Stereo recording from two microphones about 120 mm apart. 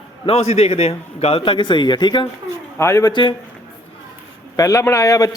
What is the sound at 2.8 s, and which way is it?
Speech, 25° left (ahead or behind).